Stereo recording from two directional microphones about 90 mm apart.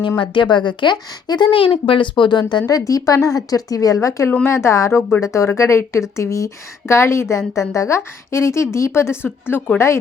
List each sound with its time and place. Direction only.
0.2 s a woman's voice: 60° left (ahead or behind); by 10.0 s 30° left (ahead or behind)